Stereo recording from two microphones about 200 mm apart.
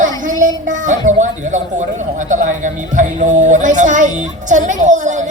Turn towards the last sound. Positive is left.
turn(degrees=-35)  # may be behind; listen again after turning